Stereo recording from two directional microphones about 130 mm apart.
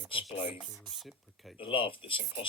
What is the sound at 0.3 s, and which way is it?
Speech, 65° left (ahead or behind).